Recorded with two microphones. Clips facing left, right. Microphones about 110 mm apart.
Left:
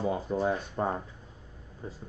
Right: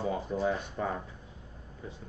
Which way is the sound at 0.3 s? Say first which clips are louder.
Left 2 dB; 35° left (ahead or behind).